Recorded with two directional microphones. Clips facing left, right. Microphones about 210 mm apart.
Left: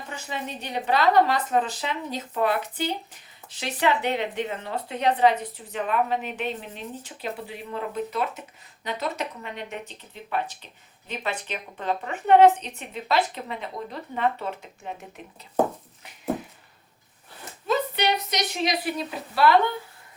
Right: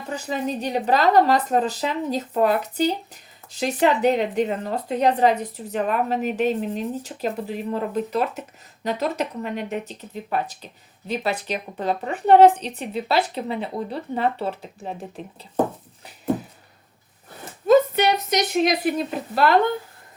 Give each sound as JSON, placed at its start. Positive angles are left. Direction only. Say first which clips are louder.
{"t": 0.1, "sound": "speech", "louder": "right 9 dB", "side_deg": -40}
{"t": 17.7, "sound": "a woman's voice", "louder": "right 8 dB", "side_deg": -45}